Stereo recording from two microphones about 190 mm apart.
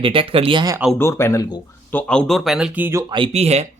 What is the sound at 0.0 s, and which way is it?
Speech, 30° right (ahead or behind).